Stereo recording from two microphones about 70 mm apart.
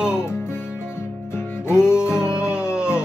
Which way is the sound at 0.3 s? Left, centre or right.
Left.